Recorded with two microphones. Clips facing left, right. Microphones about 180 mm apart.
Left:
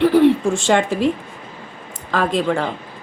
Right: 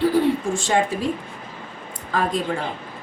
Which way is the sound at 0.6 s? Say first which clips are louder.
Left 2 dB; 85° left.